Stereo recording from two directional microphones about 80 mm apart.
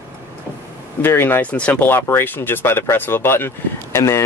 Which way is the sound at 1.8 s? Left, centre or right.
Left.